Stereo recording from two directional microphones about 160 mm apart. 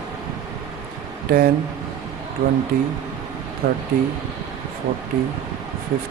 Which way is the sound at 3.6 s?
65° right (ahead or behind).